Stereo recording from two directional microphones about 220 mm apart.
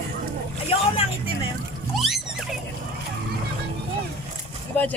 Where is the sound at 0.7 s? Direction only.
25° left (ahead or behind).